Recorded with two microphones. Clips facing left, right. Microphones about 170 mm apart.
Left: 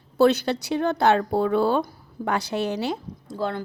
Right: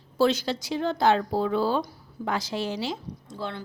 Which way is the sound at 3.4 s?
45° left (ahead or behind).